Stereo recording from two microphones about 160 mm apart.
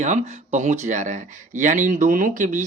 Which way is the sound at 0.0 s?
50° right (ahead or behind).